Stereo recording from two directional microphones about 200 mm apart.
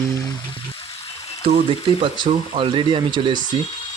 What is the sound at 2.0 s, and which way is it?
Speech, 25° right (ahead or behind).